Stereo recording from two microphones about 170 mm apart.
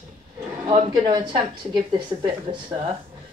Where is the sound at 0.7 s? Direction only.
25° right (ahead or behind).